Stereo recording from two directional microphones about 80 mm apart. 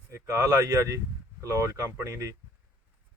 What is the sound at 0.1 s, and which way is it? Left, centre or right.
Speech, right.